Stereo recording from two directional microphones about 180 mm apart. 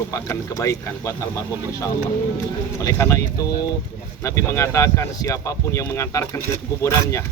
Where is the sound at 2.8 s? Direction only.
15° left (ahead or behind).